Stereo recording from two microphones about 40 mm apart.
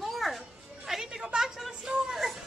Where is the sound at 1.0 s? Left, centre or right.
Centre.